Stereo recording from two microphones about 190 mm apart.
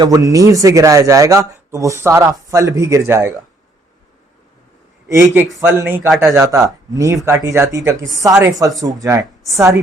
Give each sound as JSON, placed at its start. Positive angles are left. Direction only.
{"t": 0.0, "sound": "a man's voice", "side_deg": -20}
{"t": 5.0, "sound": "a man's voice", "side_deg": -15}